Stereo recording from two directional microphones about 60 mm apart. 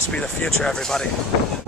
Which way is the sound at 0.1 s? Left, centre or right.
Left.